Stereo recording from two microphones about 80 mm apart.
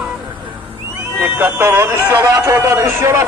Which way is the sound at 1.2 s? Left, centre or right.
Right.